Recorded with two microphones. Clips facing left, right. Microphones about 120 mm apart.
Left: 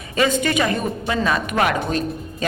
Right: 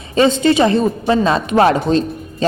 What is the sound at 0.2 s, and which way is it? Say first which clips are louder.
A woman's voice: right 7 dB; 25° right (ahead or behind).